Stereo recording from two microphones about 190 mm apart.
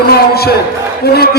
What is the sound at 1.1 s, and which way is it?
Speech, 55° left (ahead or behind).